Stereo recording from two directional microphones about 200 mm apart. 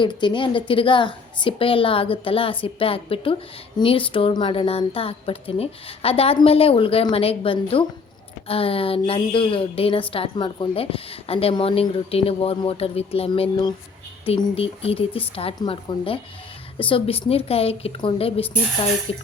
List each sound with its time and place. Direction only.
0.0 s a woman's voice: 25° left (ahead or behind)